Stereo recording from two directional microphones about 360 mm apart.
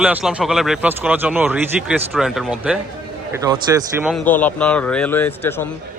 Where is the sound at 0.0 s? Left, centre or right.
Centre.